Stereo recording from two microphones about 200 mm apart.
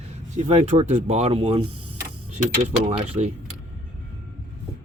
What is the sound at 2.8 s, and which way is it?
Speech, 30° right (ahead or behind).